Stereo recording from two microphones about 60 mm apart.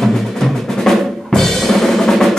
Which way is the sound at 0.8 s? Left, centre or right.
Centre.